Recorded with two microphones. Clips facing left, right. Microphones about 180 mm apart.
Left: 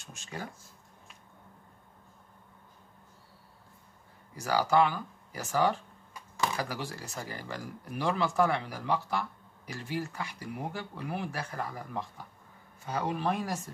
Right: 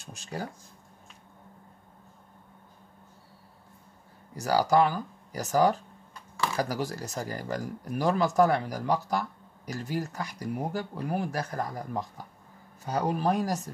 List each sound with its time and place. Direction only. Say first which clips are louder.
0.0 s speech: right 5 dB; 35° right (ahead or behind)
4.4 s speech: right 3 dB; 40° right (ahead or behind)